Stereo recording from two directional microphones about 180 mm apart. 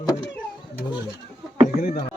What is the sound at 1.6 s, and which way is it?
Speech, 40° left (ahead or behind).